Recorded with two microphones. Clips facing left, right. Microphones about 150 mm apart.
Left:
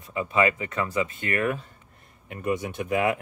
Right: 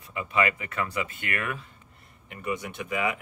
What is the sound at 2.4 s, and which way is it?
Speech, 45° left (ahead or behind).